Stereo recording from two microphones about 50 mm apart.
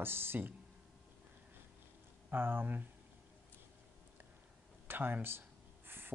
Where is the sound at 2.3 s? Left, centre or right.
Right.